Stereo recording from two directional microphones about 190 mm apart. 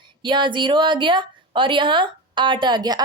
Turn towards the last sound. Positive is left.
turn(degrees=-20)  # may be behind; listen again after turning